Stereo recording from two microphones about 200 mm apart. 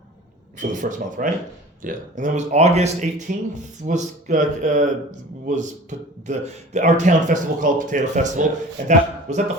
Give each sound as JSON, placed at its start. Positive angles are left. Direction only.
{"t": 0.6, "sound": "speech", "side_deg": -40}